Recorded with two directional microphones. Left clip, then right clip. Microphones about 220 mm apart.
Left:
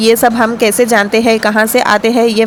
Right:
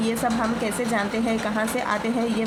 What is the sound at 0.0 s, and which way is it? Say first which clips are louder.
Speech: left 15 dB; 40° left (ahead or behind).